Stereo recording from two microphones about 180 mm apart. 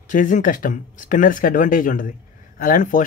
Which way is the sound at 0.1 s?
45° left (ahead or behind).